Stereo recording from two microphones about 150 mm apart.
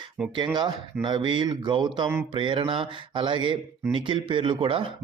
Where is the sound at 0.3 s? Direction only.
30° right (ahead or behind).